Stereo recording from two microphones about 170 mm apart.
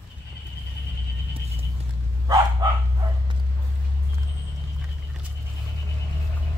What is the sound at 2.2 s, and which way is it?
Dog, 20° right (ahead or behind).